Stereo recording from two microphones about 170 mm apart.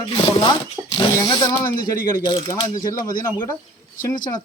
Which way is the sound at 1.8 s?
55° left (ahead or behind).